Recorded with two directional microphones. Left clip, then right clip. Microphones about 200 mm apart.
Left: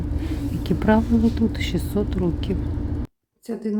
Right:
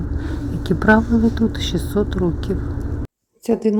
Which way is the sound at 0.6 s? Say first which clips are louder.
Right 5 dB; centre (ahead or behind).